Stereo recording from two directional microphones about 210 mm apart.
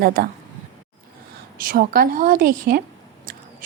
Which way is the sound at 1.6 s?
45° right (ahead or behind).